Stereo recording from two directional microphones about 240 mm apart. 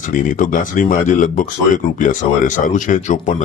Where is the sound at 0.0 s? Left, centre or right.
Left.